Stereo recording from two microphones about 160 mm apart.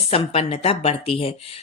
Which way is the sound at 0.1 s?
40° left (ahead or behind).